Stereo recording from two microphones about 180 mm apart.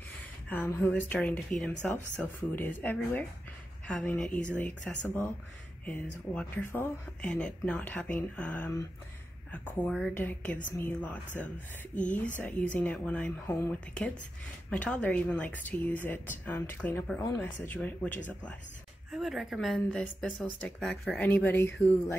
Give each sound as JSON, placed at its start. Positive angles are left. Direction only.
{"t": 0.5, "sound": "speech", "side_deg": 10}
{"t": 11.9, "sound": "speech", "side_deg": 45}
{"t": 12.4, "sound": "speech", "side_deg": 5}
{"t": 19.1, "sound": "speech", "side_deg": 0}